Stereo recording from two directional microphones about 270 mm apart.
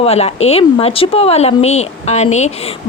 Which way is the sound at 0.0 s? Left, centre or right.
Left.